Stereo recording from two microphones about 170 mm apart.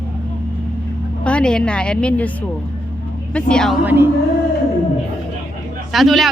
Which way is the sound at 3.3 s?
5° left (ahead or behind).